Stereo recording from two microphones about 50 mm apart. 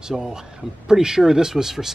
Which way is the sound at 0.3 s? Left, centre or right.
Centre.